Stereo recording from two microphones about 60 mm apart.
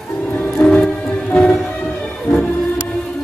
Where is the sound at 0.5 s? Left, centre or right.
Centre.